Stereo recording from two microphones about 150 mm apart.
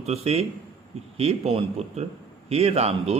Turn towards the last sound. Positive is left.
turn(degrees=-45)  # may be behind; listen again after turning